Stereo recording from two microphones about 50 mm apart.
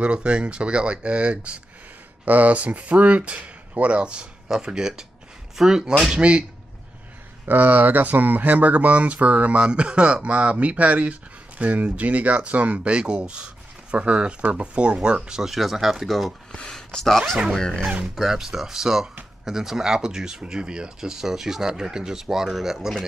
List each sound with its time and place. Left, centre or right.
0.0 s speech: right
2.2 s speech: right
7.4 s speech: right; by 15.5 s centre
15.5 s speech: centre
18.0 s speech: centre